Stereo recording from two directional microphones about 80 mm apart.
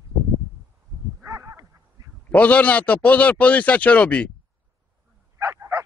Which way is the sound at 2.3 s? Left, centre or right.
Centre.